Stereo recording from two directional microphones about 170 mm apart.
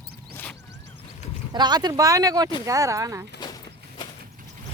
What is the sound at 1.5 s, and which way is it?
Speech, 25° right (ahead or behind).